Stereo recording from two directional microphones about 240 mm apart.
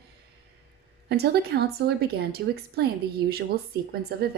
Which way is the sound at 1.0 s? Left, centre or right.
Right.